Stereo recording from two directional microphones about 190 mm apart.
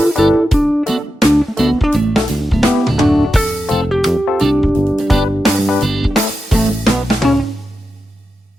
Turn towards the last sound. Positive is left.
turn(degrees=0)  # may be behind; listen again after turning